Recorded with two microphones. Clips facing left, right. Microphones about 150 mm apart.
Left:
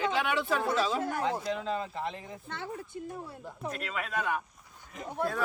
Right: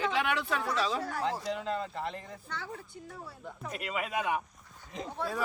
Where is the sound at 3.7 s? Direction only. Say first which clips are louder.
Right 1 dB; 10° right (ahead or behind).